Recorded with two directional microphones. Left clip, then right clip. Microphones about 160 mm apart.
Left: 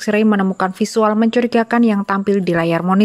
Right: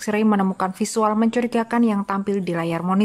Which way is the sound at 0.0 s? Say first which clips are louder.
Left 5 dB; 15° left (ahead or behind).